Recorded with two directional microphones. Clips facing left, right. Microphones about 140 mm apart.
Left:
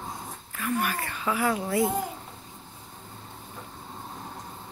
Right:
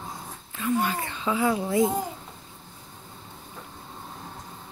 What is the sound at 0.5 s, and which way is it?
Speech, 20° right (ahead or behind).